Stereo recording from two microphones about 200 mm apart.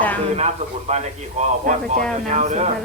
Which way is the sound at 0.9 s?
35° right (ahead or behind).